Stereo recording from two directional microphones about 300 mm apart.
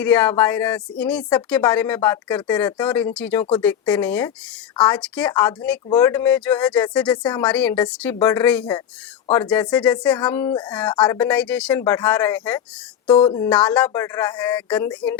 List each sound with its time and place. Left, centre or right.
0.0 s speech: centre
13.1 s speech: centre
13.5 s speech: centre